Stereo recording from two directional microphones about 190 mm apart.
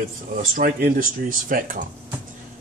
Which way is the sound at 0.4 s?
45° right (ahead or behind).